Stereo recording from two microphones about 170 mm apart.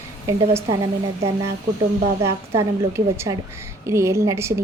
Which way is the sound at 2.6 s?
15° right (ahead or behind).